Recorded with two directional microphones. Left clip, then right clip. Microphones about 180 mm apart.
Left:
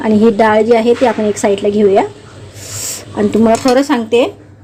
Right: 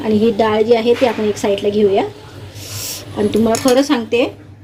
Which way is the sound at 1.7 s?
40° left (ahead or behind).